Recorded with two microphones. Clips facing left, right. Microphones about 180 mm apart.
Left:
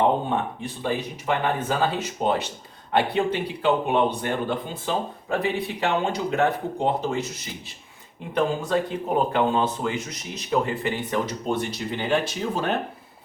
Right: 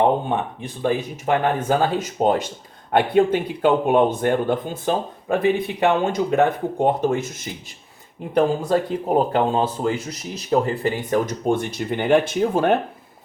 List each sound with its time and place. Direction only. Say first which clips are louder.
0.8 s speech: right 6 dB; 45° right (ahead or behind)
8.4 s speech: right 4 dB; 40° right (ahead or behind)